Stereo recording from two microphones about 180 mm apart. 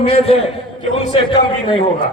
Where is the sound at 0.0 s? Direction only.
35° left (ahead or behind).